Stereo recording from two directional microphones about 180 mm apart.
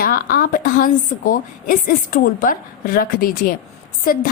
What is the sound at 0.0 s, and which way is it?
A woman's voice, 55° left (ahead or behind).